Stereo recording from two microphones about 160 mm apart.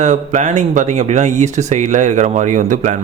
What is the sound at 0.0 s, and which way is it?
Speech, 45° right (ahead or behind).